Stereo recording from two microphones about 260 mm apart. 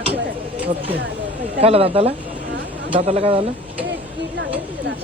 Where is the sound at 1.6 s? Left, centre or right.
Right.